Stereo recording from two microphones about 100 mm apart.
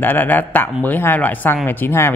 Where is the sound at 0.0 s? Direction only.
20° left (ahead or behind).